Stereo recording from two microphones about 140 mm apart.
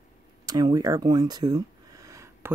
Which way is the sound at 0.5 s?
25° right (ahead or behind).